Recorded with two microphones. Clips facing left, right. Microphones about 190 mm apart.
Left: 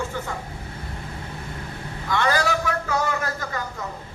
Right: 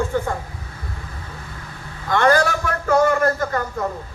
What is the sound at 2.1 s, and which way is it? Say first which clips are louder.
A man's voice: right 5 dB; 50° right (ahead or behind).